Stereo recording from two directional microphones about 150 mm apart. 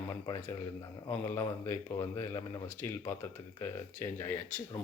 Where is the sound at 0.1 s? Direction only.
20° left (ahead or behind).